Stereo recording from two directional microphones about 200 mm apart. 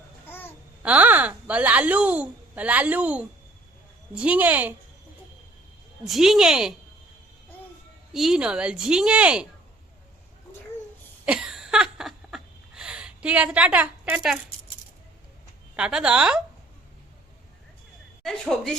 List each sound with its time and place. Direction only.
0.3 s babbling: 10° left (ahead or behind)
0.8 s a woman's voice: 5° right (ahead or behind)
6.1 s a woman's voice: centre (ahead or behind)
8.1 s a woman's voice: centre (ahead or behind)
11.3 s a sound: 5° right (ahead or behind)
15.7 s a woman's voice: 5° right (ahead or behind)
18.2 s a woman's voice: centre (ahead or behind)